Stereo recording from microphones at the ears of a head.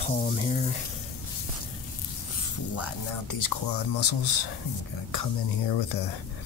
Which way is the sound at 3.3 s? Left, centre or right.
Left.